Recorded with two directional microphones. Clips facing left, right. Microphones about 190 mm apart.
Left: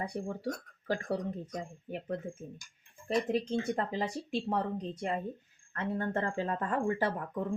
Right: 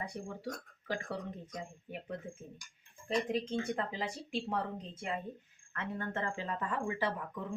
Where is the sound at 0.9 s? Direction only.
40° left (ahead or behind).